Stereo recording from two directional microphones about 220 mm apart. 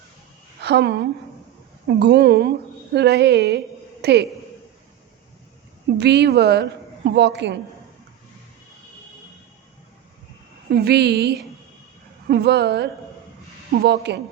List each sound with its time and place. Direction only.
0.6 s a woman's voice: 50° right (ahead or behind)
6.0 s a woman's voice: 50° right (ahead or behind)
10.7 s a woman's voice: 45° right (ahead or behind)